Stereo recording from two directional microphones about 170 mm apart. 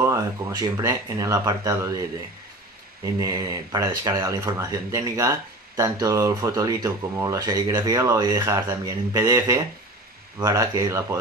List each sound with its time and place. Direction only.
0.0 s speech: 20° right (ahead or behind)
3.2 s speech: 20° right (ahead or behind)